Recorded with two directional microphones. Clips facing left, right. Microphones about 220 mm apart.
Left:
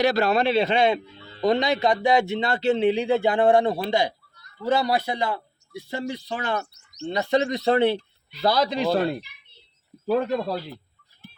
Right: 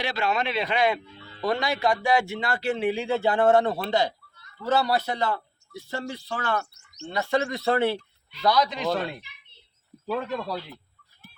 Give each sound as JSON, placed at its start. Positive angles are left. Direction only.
{"t": 0.0, "sound": "fowl", "side_deg": 40}
{"t": 1.4, "sound": "speech", "side_deg": 20}
{"t": 8.3, "sound": "fowl", "side_deg": 35}